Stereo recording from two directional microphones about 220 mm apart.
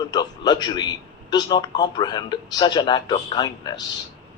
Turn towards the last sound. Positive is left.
turn(degrees=20)  # may be behind; listen again after turning